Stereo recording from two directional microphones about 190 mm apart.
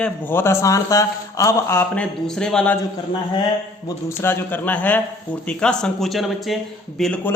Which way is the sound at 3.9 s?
15° left (ahead or behind).